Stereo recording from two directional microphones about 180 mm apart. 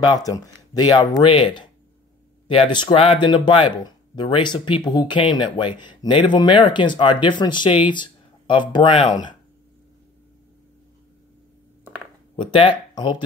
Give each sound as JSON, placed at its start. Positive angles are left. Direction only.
{"t": 0.0, "sound": "speech", "side_deg": 20}
{"t": 11.8, "sound": "a sound", "side_deg": -5}
{"t": 12.4, "sound": "speech", "side_deg": 30}